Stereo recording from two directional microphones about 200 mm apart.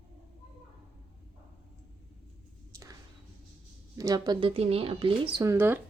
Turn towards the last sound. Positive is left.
turn(degrees=-10)  # may be behind; listen again after turning